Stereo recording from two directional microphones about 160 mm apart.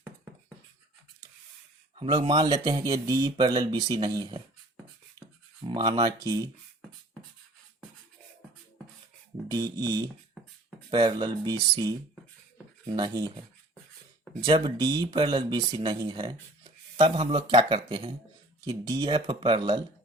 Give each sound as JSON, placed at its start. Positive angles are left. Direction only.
{"t": 2.0, "sound": "speech", "side_deg": -30}
{"t": 5.6, "sound": "speech", "side_deg": -30}
{"t": 9.5, "sound": "speech", "side_deg": -25}
{"t": 14.4, "sound": "speech", "side_deg": -30}